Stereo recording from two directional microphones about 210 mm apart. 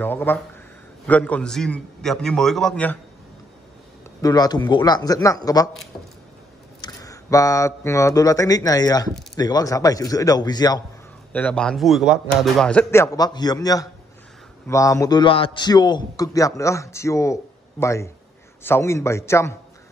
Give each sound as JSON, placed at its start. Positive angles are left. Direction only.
{"t": 0.0, "sound": "a man's voice", "side_deg": 10}
{"t": 4.2, "sound": "a man's voice", "side_deg": 20}
{"t": 6.8, "sound": "a man's voice", "side_deg": 15}
{"t": 11.3, "sound": "a man's voice", "side_deg": 5}